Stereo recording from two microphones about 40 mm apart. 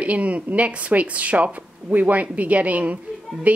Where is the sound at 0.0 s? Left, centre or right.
Right.